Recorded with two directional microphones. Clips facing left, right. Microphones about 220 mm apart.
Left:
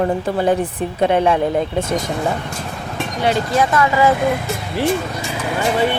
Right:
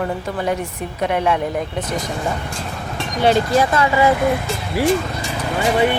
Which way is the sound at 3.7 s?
25° right (ahead or behind).